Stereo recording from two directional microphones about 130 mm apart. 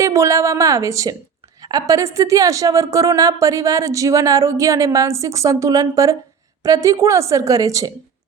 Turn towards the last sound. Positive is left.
turn(degrees=-25)  # may be behind; listen again after turning